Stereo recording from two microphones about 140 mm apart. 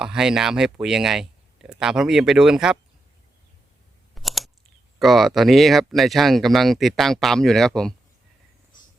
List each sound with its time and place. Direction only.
0.0 s speech: 5° right (ahead or behind)
4.1 s scissors: centre (ahead or behind)
4.9 s speech: centre (ahead or behind)